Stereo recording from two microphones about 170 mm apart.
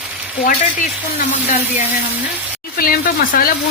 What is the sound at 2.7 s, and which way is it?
Speech, 60° left (ahead or behind).